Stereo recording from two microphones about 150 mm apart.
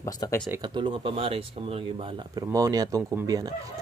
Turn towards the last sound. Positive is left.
turn(degrees=-25)  # may be behind; listen again after turning